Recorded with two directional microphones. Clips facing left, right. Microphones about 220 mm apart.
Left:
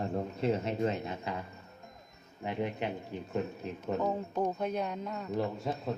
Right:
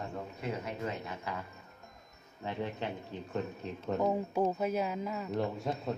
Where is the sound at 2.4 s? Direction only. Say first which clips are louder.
Left 3 dB; 15° left (ahead or behind).